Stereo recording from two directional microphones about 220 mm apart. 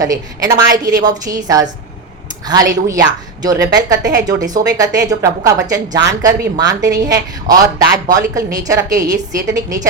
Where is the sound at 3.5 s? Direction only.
50° right (ahead or behind).